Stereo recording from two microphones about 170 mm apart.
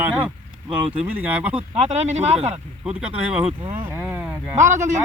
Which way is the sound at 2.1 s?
40° right (ahead or behind).